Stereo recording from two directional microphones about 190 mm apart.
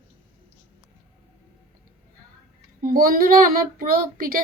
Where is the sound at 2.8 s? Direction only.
50° right (ahead or behind).